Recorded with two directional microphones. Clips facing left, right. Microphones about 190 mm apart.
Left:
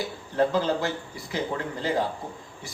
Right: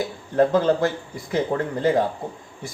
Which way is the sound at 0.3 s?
50° right (ahead or behind).